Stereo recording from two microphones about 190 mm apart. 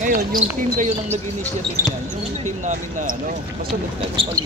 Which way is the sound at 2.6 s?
45° right (ahead or behind).